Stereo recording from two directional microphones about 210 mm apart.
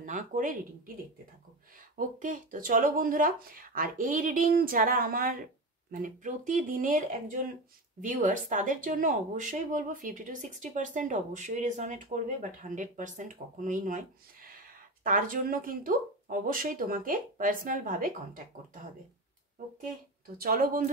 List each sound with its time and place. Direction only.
0.0 s speech: 35° right (ahead or behind)
2.0 s speech: 40° right (ahead or behind)
20.3 s speech: 45° right (ahead or behind)